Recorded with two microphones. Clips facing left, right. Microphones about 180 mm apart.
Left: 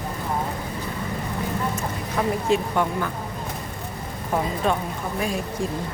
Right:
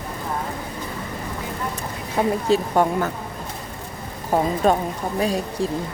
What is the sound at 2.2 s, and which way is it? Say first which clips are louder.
Speech: right 3 dB; 30° right (ahead or behind).